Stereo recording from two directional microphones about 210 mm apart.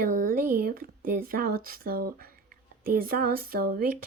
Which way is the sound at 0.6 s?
45° right (ahead or behind).